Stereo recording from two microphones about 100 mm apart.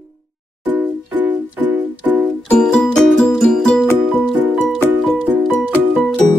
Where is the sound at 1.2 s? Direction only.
15° right (ahead or behind).